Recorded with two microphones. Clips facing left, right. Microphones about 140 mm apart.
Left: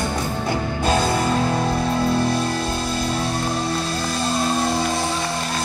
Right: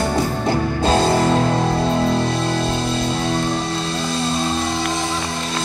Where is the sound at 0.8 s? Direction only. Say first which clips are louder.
Right 4 dB; 25° right (ahead or behind).